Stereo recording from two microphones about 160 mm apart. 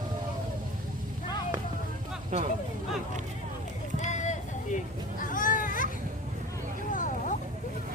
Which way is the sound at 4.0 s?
50° left (ahead or behind).